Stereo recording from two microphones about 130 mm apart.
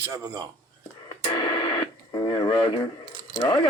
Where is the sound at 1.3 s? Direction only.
35° left (ahead or behind).